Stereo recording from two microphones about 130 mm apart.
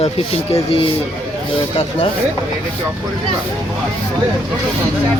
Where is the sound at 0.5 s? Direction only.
50° left (ahead or behind).